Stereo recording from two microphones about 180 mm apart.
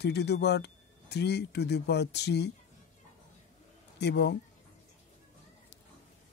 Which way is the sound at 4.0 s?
65° left (ahead or behind).